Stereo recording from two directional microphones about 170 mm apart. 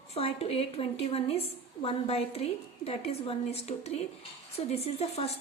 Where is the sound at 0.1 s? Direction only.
35° left (ahead or behind).